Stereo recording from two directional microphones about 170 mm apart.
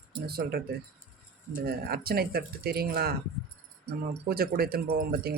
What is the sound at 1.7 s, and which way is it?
Speech, 65° right (ahead or behind).